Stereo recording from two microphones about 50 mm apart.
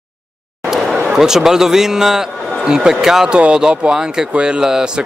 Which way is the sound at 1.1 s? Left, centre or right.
Centre.